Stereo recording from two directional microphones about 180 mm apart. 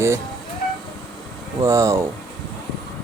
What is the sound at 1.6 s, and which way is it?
Speech, 15° right (ahead or behind).